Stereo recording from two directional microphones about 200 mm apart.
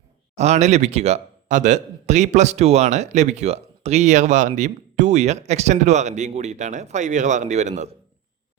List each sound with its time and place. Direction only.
0.3 s speech: 35° right (ahead or behind)